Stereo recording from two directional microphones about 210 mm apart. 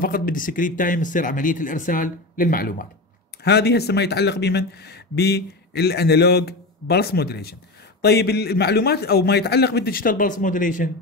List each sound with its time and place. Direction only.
0.0 s speech: 40° left (ahead or behind)